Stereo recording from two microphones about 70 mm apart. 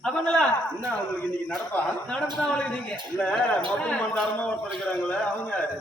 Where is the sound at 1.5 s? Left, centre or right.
Centre.